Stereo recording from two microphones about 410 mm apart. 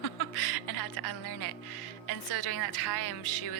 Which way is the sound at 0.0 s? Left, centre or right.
Left.